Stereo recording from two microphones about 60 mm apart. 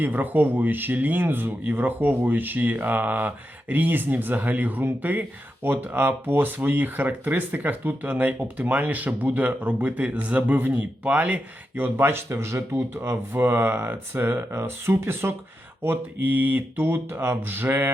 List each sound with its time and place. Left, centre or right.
0.0 s speech: right
11.8 s speech: right